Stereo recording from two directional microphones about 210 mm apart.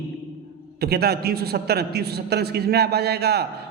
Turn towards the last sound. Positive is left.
turn(degrees=-50)  # may be behind; listen again after turning